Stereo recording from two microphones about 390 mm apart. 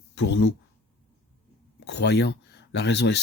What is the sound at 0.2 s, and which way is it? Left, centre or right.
Speech, left.